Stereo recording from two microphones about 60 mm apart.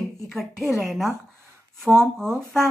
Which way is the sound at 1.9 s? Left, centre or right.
Centre.